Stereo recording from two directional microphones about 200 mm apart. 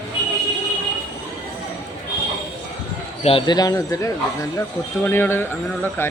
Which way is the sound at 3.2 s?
25° left (ahead or behind).